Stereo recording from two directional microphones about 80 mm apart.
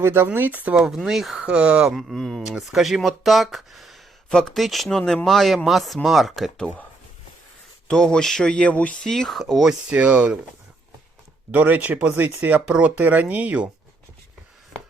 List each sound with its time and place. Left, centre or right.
0.0 s speech: right
0.7 s speech: centre
2.0 s a sound: centre
2.5 s speech: centre
7.9 s a sound: centre
9.0 s speech: centre
9.9 s speech: centre
11.5 s speech: right